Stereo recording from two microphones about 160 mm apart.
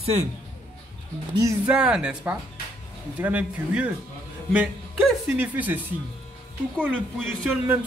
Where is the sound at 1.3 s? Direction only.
20° right (ahead or behind).